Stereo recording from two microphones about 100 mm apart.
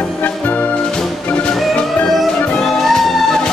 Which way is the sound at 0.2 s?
15° left (ahead or behind).